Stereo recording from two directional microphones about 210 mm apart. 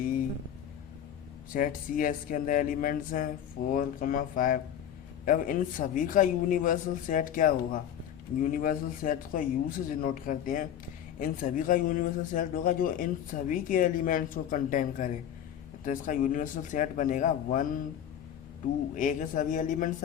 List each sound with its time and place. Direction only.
1.5 s a man's voice: 40° left (ahead or behind)
18.9 s a man's voice: 40° left (ahead or behind)